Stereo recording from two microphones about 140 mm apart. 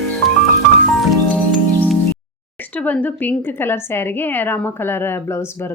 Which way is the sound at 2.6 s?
10° left (ahead or behind).